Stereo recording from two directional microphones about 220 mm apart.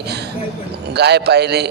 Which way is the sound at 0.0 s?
50° right (ahead or behind).